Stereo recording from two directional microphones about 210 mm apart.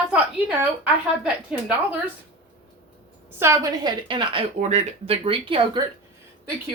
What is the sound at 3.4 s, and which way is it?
Speech, 15° right (ahead or behind).